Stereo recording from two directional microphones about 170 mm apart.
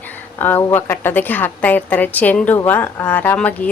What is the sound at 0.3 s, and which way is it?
A woman's voice, 10° left (ahead or behind).